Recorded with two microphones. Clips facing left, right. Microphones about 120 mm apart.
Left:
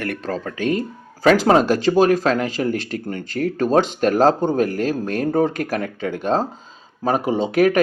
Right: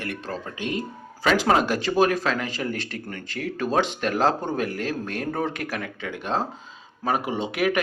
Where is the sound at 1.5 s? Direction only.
35° left (ahead or behind).